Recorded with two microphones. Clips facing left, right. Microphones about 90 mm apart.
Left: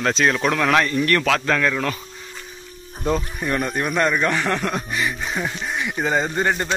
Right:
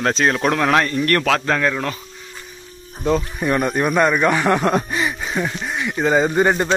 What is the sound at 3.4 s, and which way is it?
Speech, 10° right (ahead or behind).